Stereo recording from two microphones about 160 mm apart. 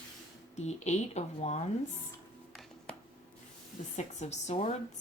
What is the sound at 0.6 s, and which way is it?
Speech, 45° left (ahead or behind).